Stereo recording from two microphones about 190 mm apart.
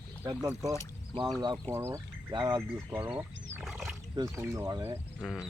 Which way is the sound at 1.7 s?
15° right (ahead or behind).